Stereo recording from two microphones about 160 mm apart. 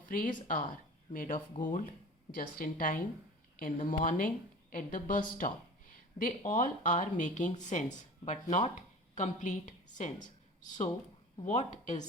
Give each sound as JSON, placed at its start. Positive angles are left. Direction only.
{"t": 0.1, "sound": "a woman's voice", "side_deg": 60}
{"t": 11.4, "sound": "speech", "side_deg": 45}